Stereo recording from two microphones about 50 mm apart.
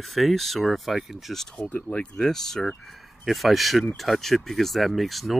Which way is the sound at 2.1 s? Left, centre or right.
Centre.